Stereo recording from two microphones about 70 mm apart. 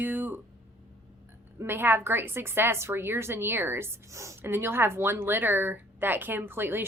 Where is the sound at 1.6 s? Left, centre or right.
Right.